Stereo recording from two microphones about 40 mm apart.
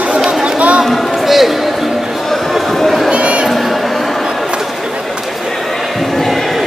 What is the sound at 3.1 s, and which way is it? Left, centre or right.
Crowd, right.